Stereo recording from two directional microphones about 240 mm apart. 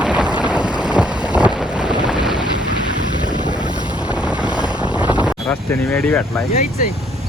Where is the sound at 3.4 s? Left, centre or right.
Centre.